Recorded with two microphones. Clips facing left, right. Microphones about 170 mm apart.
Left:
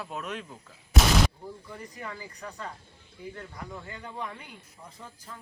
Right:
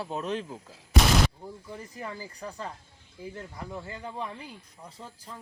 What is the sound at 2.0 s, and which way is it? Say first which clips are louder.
Speech: right 3 dB; 30° right (ahead or behind).